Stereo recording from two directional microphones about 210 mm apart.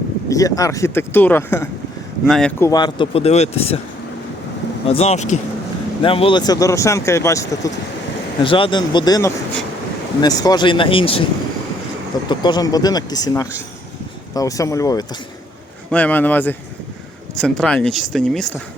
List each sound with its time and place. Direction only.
0.3 s speech: 15° left (ahead or behind)
2.2 s speech: centre (ahead or behind)
2.6 s speech: 15° left (ahead or behind)
4.9 s speech: 30° left (ahead or behind)
12.3 s speech: 20° left (ahead or behind); by 18.5 s 5° left (ahead or behind)